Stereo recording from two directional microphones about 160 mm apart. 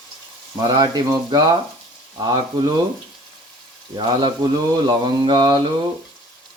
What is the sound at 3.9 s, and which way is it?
Speech, 25° right (ahead or behind).